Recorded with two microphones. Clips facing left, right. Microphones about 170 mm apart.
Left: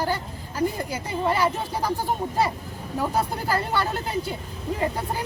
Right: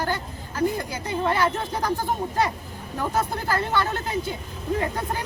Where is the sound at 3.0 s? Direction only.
10° left (ahead or behind).